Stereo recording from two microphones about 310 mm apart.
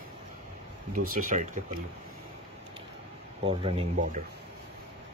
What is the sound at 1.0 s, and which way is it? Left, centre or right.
Speech, right.